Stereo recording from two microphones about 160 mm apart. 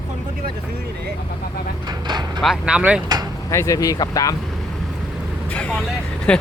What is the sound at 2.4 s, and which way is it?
Speech, 5° right (ahead or behind).